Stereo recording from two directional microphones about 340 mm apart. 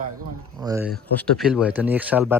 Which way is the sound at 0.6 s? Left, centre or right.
Centre.